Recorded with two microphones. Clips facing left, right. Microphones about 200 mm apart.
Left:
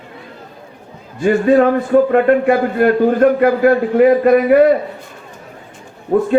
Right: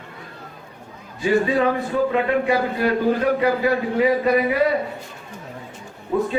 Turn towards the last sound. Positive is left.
turn(degrees=50)  # may be behind; listen again after turning